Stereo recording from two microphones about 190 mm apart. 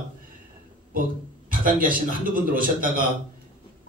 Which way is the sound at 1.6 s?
50° right (ahead or behind).